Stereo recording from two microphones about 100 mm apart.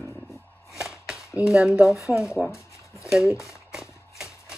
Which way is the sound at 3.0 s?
5° right (ahead or behind).